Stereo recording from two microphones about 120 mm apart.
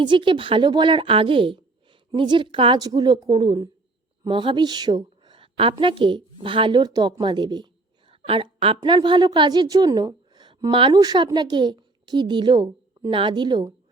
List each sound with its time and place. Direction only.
0.0 s speech: 45° right (ahead or behind)
2.7 s a woman's voice: 35° right (ahead or behind)
5.2 s a sound: 45° right (ahead or behind)
5.8 s a woman's voice: 45° right (ahead or behind)
10.9 s a woman's voice: 35° right (ahead or behind)